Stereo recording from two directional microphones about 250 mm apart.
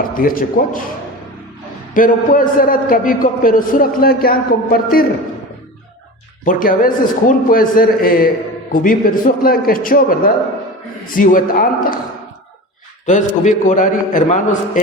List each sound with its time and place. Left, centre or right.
0.1 s a man's voice: left
1.9 s a man's voice: left
6.4 s a man's voice: left
13.1 s a man's voice: left